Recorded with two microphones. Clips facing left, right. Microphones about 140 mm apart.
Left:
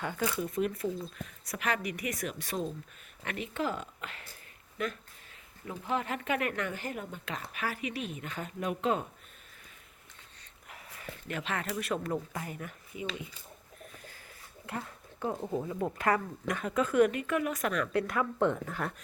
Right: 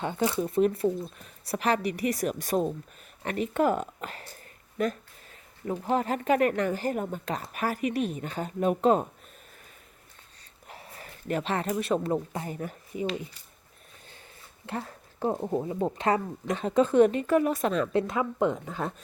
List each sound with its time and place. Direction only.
0.0 s speech: 25° right (ahead or behind)
10.7 s a sound: 30° right (ahead or behind)
11.7 s speech: 30° right (ahead or behind)
14.7 s speech: 30° right (ahead or behind)